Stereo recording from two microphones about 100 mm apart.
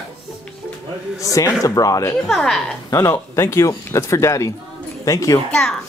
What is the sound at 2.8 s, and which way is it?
A woman's voice, 35° left (ahead or behind).